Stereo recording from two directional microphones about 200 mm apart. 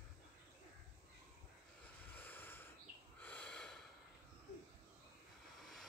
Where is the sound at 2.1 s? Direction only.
10° left (ahead or behind).